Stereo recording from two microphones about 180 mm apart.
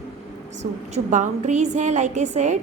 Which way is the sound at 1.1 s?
40° right (ahead or behind).